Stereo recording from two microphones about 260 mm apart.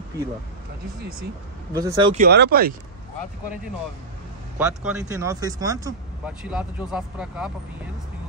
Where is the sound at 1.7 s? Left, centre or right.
Centre.